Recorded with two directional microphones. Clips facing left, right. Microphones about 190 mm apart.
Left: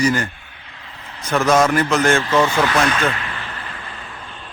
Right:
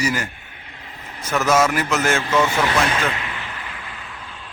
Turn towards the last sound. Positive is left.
turn(degrees=0)  # may be behind; listen again after turning